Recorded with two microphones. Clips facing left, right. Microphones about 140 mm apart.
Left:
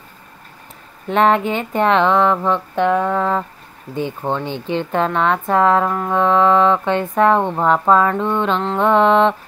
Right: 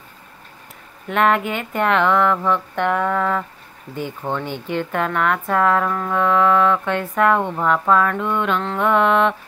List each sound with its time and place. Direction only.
1.0 s speech: 30° left (ahead or behind)